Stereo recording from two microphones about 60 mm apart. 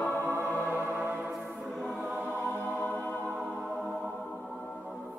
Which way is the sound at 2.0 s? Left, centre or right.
Right.